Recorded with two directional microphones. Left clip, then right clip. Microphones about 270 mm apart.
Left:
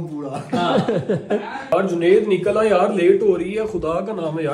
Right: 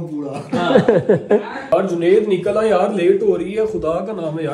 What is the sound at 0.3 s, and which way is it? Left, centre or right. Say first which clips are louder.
Speech: right 4 dB; centre.